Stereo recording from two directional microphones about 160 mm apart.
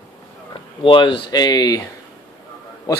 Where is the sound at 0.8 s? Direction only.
35° left (ahead or behind).